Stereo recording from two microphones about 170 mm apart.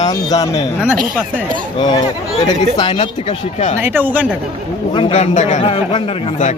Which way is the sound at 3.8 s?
10° right (ahead or behind).